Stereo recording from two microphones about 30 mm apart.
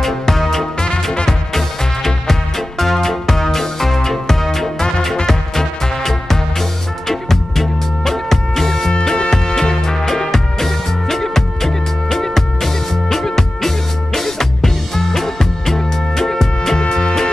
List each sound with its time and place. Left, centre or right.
0.0 s music: centre
0.7 s music: left
2.8 s music: centre
5.1 s music: centre
16.7 s music: left